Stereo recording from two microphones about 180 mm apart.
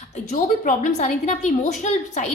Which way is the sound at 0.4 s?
45° left (ahead or behind).